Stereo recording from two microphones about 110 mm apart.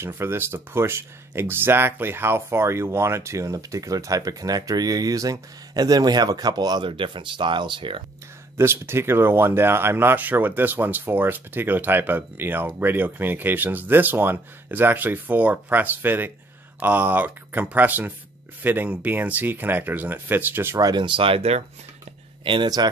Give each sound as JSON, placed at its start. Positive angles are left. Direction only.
{"t": 0.0, "sound": "speech", "side_deg": -20}
{"t": 6.9, "sound": "speech", "side_deg": -50}
{"t": 8.5, "sound": "speech", "side_deg": -20}
{"t": 20.8, "sound": "speech", "side_deg": -45}
{"t": 22.4, "sound": "speech", "side_deg": -50}